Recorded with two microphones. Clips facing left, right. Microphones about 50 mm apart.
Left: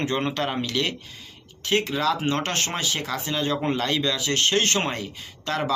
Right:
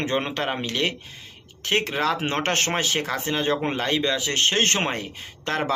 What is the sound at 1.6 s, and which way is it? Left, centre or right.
Speech, right.